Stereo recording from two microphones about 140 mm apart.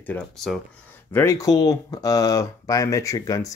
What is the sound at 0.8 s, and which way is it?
Speech, 20° left (ahead or behind).